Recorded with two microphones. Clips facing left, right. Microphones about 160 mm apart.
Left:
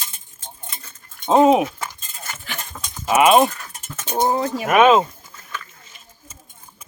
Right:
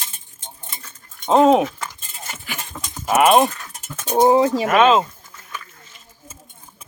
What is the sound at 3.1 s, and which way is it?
Cutlery, centre (ahead or behind).